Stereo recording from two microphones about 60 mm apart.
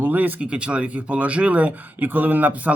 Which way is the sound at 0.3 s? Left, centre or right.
Centre.